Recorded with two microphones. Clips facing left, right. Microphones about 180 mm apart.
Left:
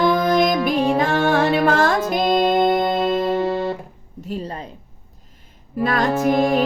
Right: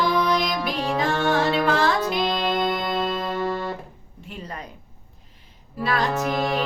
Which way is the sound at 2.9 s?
20° left (ahead or behind).